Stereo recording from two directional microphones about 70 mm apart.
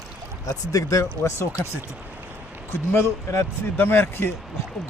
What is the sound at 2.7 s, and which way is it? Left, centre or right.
Speech, left.